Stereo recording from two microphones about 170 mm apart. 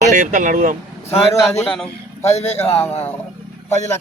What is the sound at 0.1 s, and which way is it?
Speech, 50° right (ahead or behind).